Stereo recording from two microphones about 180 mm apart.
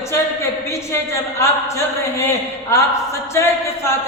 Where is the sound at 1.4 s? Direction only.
15° left (ahead or behind).